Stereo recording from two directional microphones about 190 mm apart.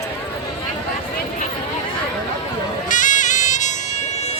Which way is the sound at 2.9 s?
40° left (ahead or behind).